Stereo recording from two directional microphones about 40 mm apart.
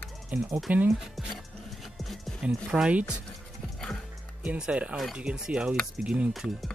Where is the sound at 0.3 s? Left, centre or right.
Right.